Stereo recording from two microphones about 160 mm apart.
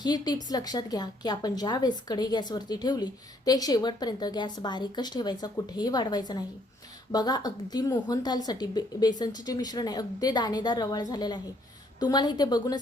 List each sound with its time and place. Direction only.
0.0 s a woman's voice: 25° left (ahead or behind)